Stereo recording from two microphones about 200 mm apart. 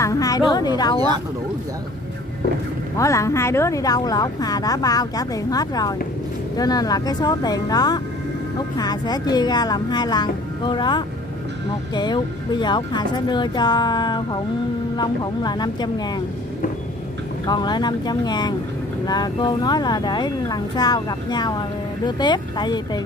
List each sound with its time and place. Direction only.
0.0 s a woman's voice: 20° left (ahead or behind)
3.0 s speech: 15° left (ahead or behind)
17.5 s speech: 20° left (ahead or behind)